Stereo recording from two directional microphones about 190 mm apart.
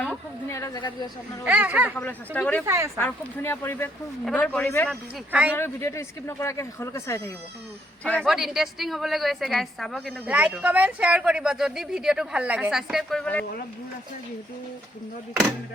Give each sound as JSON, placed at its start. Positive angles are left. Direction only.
{"t": 0.5, "sound": "a woman's voice", "side_deg": 15}
{"t": 1.5, "sound": "speech", "side_deg": -10}
{"t": 2.0, "sound": "speech", "side_deg": 10}
{"t": 2.6, "sound": "speech", "side_deg": -15}
{"t": 3.0, "sound": "a woman's voice", "side_deg": 10}
{"t": 4.9, "sound": "speech", "side_deg": -5}
{"t": 5.5, "sound": "speech", "side_deg": 15}
{"t": 8.2, "sound": "a woman's voice", "side_deg": 0}